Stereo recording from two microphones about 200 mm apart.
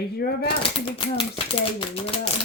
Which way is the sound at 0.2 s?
50° left (ahead or behind).